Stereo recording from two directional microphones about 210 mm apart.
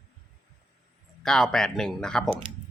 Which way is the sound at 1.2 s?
5° left (ahead or behind).